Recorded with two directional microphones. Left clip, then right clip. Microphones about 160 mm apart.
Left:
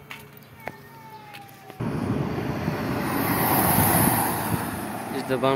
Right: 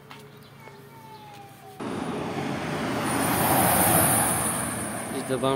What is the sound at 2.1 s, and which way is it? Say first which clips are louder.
Vehicle: left 1 dB; 20° left (ahead or behind).